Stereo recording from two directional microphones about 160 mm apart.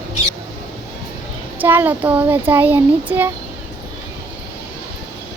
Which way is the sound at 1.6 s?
10° right (ahead or behind).